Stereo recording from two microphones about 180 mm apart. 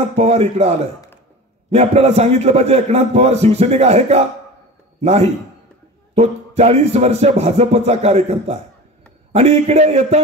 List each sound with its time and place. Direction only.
0.1 s a man's voice: 35° right (ahead or behind)